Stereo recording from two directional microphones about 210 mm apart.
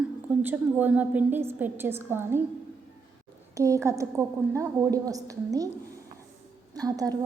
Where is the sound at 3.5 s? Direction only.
15° right (ahead or behind).